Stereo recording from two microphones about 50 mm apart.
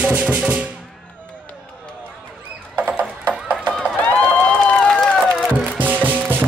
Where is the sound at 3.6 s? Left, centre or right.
Left.